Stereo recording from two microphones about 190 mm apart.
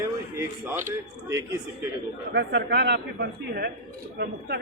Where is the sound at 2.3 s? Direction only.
65° right (ahead or behind).